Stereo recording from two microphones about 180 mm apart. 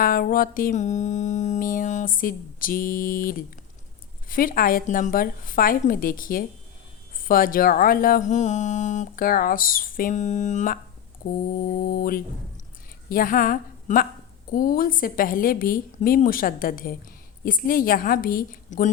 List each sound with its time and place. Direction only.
0.0 s speech: 50° left (ahead or behind)
11.2 s mantra: 60° left (ahead or behind)
11.9 s a woman's voice: 50° left (ahead or behind)